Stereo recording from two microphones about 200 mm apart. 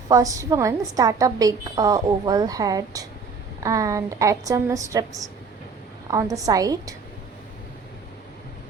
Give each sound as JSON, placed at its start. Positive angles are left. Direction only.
{"t": 0.1, "sound": "a woman's voice", "side_deg": -15}